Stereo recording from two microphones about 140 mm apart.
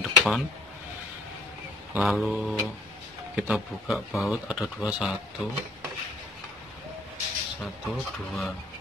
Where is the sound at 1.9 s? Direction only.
5° right (ahead or behind).